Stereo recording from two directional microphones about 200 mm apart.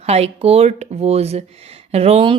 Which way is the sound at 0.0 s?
30° right (ahead or behind).